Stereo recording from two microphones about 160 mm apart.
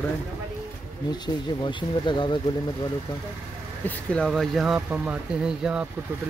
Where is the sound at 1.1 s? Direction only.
30° left (ahead or behind).